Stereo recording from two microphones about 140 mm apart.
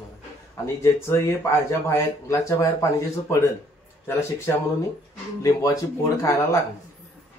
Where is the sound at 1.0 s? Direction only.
20° left (ahead or behind).